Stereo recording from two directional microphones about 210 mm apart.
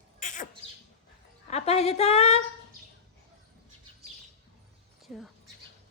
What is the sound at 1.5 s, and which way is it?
Speech, 30° left (ahead or behind).